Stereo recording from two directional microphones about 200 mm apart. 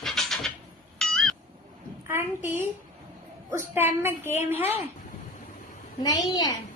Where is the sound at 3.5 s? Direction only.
10° right (ahead or behind).